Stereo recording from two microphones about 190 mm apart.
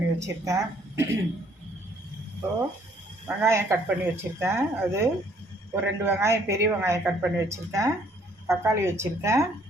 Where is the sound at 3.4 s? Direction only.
15° right (ahead or behind).